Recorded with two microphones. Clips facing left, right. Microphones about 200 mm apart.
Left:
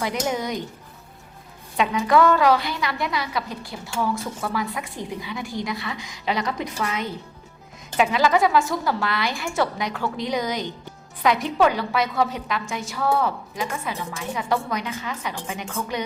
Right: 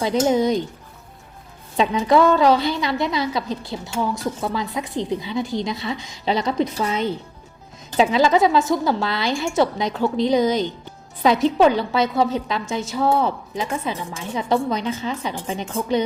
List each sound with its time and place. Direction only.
0.0 s a woman's voice: 30° right (ahead or behind)
1.7 s a woman's voice: 30° right (ahead or behind)